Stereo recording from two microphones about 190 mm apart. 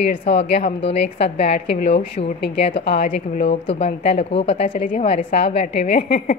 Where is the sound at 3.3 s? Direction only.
35° left (ahead or behind).